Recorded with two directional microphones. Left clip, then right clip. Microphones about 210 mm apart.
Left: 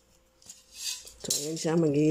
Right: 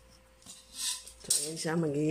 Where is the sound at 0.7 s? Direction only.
10° left (ahead or behind).